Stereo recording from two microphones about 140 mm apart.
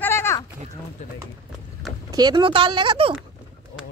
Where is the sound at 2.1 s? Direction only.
30° right (ahead or behind).